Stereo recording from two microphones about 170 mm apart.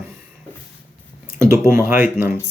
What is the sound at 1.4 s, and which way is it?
Speech, 15° right (ahead or behind).